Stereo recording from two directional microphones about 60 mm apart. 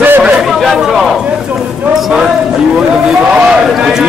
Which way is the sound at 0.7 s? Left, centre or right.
Centre.